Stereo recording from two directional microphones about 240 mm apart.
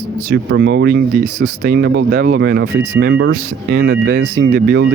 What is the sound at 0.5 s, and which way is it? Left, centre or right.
Speech, right.